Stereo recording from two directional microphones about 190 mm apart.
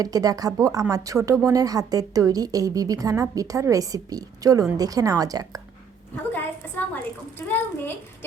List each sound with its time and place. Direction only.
0.0 s a woman's voice: 20° right (ahead or behind)
6.3 s a woman's voice: 10° left (ahead or behind)